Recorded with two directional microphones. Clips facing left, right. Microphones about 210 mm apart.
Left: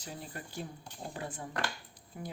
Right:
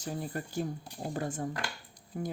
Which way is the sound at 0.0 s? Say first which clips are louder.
Right 8 dB; 45° right (ahead or behind).